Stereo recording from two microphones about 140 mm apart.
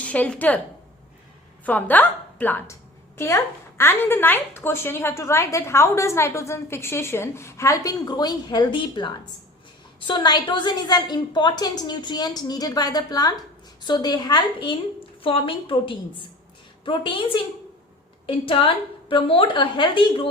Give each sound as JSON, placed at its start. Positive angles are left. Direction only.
{"t": 0.0, "sound": "a woman's voice", "side_deg": 10}
{"t": 1.6, "sound": "a woman's voice", "side_deg": 10}